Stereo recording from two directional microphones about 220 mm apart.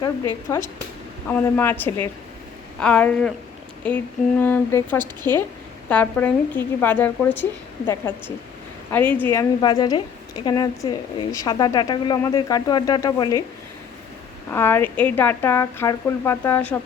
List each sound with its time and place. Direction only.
0.5 s speech: 10° left (ahead or behind)
2.8 s a sound: 5° left (ahead or behind)
3.8 s speech: 5° left (ahead or behind)
8.9 s speech: 10° left (ahead or behind)
14.5 s speech: 10° left (ahead or behind)